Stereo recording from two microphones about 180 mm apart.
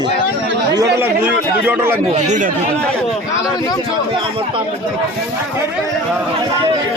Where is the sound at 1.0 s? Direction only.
10° right (ahead or behind).